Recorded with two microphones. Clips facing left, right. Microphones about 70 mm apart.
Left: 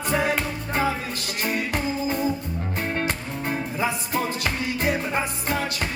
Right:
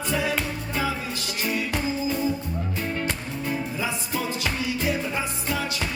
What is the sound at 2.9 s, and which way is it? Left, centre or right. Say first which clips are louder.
Music: left 2 dB; left.